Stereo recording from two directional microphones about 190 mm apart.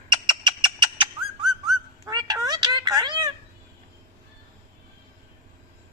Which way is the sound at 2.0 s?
20° right (ahead or behind).